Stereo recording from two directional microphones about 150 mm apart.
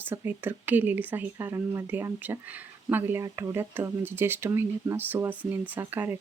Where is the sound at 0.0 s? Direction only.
15° right (ahead or behind).